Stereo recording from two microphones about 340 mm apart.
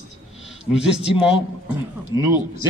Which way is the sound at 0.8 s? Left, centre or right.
Centre.